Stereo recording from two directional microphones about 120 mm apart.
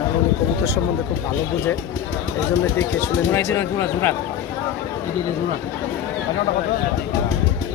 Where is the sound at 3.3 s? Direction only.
20° left (ahead or behind).